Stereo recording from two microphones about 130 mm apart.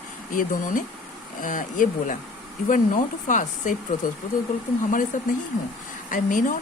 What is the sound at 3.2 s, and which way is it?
Speech, 75° left (ahead or behind).